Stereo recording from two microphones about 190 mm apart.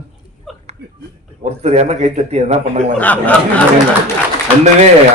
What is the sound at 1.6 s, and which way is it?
Speech, 35° right (ahead or behind).